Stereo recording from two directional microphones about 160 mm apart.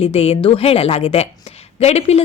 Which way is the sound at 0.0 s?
40° left (ahead or behind).